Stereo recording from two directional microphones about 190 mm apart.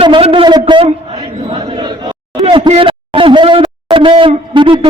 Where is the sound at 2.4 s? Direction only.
25° right (ahead or behind).